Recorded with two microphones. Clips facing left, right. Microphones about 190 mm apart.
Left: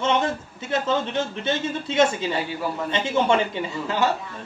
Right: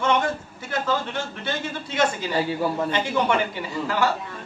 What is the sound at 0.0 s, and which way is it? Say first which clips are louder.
A man's voice: even; 20° left (ahead or behind).